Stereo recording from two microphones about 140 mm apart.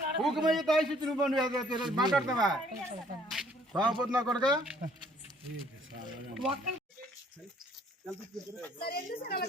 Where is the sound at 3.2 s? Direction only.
5° right (ahead or behind).